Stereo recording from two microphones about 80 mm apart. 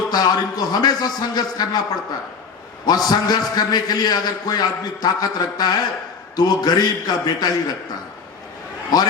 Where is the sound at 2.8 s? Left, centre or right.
Left.